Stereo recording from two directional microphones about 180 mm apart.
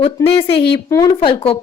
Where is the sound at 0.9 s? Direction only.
20° left (ahead or behind).